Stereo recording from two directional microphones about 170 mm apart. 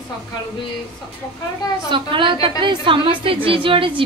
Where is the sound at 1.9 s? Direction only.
30° right (ahead or behind).